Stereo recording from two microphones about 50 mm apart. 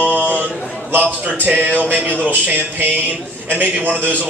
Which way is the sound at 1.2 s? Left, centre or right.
Right.